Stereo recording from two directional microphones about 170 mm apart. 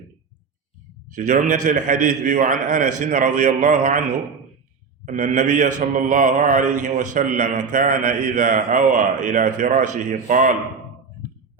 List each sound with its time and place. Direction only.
1.1 s a man's voice: 45° right (ahead or behind)
5.0 s a man's voice: 45° right (ahead or behind)